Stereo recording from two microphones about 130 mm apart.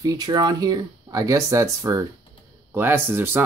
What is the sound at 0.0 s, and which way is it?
Speech, 30° right (ahead or behind).